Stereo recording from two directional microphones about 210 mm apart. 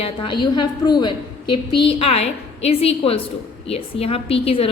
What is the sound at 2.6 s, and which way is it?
A woman's voice, 30° left (ahead or behind).